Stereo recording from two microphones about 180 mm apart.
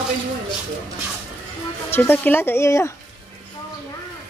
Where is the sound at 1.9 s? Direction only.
10° left (ahead or behind).